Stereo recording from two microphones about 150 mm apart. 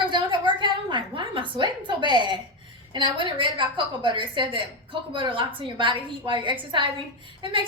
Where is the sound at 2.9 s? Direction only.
30° right (ahead or behind).